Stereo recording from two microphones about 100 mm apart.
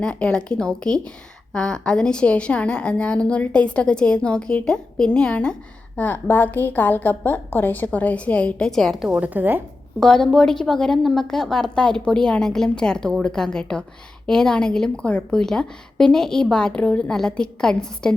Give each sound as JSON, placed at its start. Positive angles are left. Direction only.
{"t": 0.0, "sound": "a woman's voice", "side_deg": 10}
{"t": 9.1, "sound": "a woman's voice", "side_deg": -15}
{"t": 10.0, "sound": "a woman's voice", "side_deg": 5}